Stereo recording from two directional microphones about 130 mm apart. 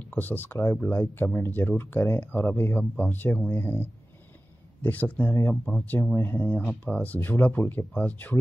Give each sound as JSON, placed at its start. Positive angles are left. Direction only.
{"t": 0.1, "sound": "speech", "side_deg": 15}
{"t": 5.7, "sound": "speech", "side_deg": 5}
{"t": 6.1, "sound": "speech", "side_deg": 15}